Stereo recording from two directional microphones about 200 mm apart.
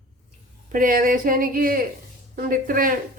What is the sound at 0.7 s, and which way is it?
Speech, 45° right (ahead or behind).